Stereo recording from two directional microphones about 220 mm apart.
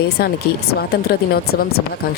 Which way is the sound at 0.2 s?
45° left (ahead or behind).